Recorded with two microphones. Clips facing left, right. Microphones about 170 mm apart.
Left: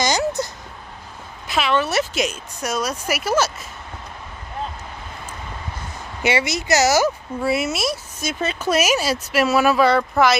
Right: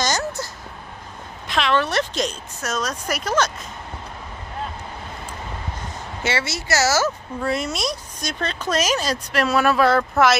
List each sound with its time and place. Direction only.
0.0 s a sound: 15° left (ahead or behind)
1.5 s speech: 5° left (ahead or behind)
6.2 s speech: 15° left (ahead or behind); by 10.3 s centre (ahead or behind)